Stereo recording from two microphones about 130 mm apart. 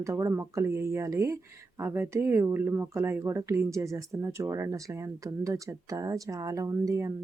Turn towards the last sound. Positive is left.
turn(degrees=-25)  # may be behind; listen again after turning